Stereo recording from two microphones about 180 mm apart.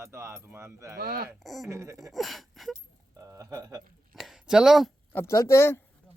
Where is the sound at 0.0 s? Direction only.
15° right (ahead or behind).